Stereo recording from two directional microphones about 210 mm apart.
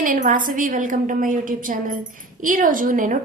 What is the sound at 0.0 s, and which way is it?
A woman's voice, 40° right (ahead or behind).